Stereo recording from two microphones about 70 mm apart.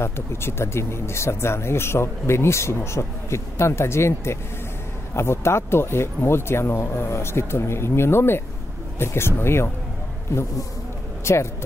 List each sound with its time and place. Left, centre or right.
0.0 s speech: left
11.3 s speech: left